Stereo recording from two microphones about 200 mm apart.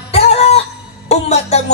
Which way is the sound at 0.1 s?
30° left (ahead or behind).